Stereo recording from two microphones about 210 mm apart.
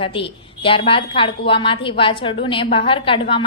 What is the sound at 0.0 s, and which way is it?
A woman's voice, 25° left (ahead or behind).